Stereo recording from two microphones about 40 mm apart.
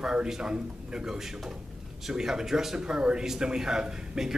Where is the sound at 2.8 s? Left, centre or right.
Right.